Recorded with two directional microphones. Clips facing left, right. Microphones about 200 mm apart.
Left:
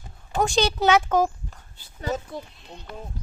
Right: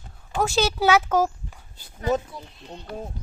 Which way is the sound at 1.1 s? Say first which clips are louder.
Even; 10° right (ahead or behind).